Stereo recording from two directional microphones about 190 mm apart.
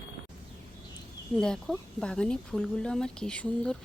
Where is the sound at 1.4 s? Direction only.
5° left (ahead or behind).